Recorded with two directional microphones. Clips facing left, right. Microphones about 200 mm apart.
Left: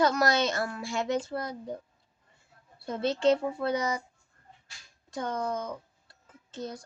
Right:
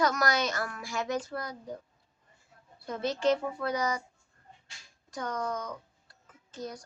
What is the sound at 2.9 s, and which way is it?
A woman's voice, 25° left (ahead or behind).